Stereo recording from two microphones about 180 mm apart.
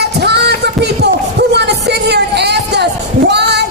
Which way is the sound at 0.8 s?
65° right (ahead or behind).